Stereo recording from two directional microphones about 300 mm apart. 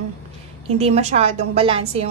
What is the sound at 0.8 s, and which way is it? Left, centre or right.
A woman's voice, right.